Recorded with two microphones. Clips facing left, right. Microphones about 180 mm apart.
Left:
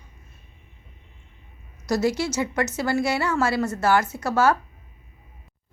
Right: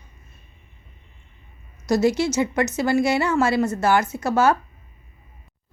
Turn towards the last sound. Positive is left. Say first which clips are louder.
# right 2 dB
turn(degrees=-20)  # may be behind; listen again after turning